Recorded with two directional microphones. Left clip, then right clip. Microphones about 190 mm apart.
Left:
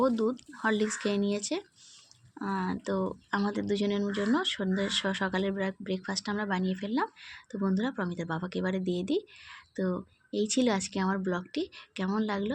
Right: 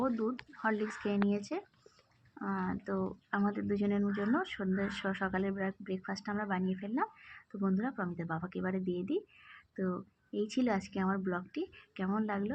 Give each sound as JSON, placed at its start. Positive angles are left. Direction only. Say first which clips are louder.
{"t": 0.3, "sound": "speech", "louder": "left 5 dB", "side_deg": 25}
{"t": 3.8, "sound": "speech", "louder": "left 4 dB", "side_deg": 30}
{"t": 4.4, "sound": "speech", "louder": "left 5 dB", "side_deg": 20}
{"t": 9.5, "sound": "a sound", "louder": "left 5 dB", "side_deg": 20}
{"t": 10.5, "sound": "speech", "louder": "left 6 dB", "side_deg": 20}